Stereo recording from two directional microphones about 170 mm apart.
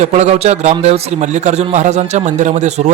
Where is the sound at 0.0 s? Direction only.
40° right (ahead or behind).